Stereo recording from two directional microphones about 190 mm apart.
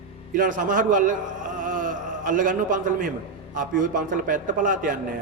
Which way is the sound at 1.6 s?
45° right (ahead or behind).